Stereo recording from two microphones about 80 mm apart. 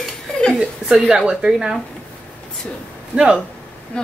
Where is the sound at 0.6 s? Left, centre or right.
Centre.